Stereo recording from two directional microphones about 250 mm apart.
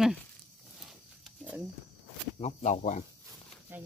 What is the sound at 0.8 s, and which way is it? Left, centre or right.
Wild animals, centre.